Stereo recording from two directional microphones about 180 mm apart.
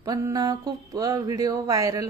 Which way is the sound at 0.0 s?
20° right (ahead or behind).